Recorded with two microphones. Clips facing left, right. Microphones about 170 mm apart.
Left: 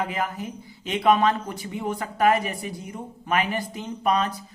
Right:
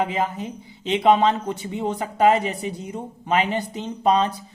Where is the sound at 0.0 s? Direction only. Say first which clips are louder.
Right 4 dB; 20° right (ahead or behind).